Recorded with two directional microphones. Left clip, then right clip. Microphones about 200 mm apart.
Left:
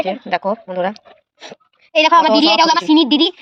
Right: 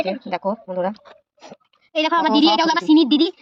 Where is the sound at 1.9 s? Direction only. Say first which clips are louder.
Left 7 dB; 15° left (ahead or behind).